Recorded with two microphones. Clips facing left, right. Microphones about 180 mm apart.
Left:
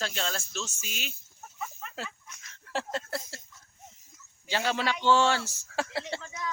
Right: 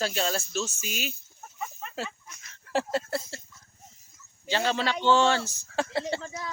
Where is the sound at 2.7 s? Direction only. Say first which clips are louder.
Right 5 dB; 10° right (ahead or behind).